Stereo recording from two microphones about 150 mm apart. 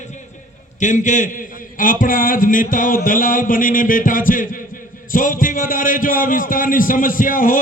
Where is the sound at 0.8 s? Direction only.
55° left (ahead or behind).